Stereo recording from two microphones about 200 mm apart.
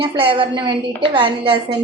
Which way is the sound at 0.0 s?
25° right (ahead or behind).